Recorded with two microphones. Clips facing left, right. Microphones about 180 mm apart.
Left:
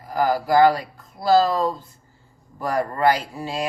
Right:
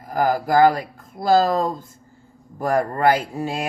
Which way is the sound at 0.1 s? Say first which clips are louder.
Even; 50° right (ahead or behind).